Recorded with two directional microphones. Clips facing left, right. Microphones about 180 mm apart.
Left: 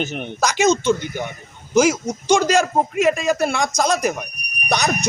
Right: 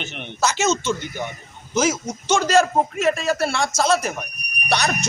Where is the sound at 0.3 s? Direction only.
15° left (ahead or behind).